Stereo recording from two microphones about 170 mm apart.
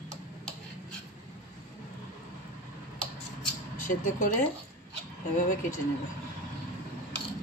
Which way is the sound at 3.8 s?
50° left (ahead or behind).